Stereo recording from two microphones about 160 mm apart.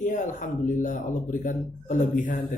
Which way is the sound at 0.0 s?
50° left (ahead or behind).